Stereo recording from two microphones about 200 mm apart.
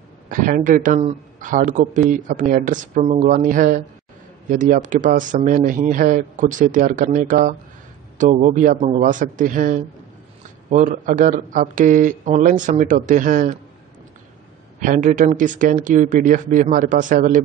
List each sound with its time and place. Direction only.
0.3 s speech: 45° right (ahead or behind)
14.8 s speech: 40° right (ahead or behind)